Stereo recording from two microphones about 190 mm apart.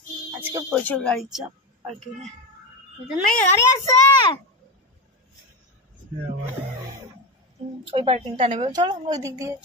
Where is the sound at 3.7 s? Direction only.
15° left (ahead or behind).